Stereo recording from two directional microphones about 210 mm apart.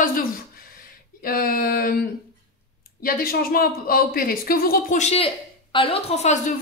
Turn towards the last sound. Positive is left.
turn(degrees=30)  # may be behind; listen again after turning